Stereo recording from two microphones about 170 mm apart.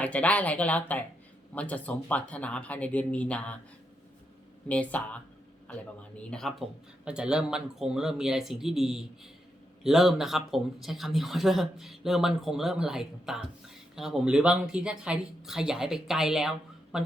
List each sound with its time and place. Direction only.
0.0 s speech: 10° left (ahead or behind)
4.7 s speech: 10° left (ahead or behind)